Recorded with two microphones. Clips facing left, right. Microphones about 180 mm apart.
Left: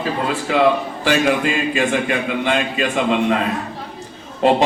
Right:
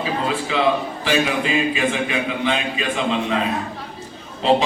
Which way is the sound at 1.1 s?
50° left (ahead or behind).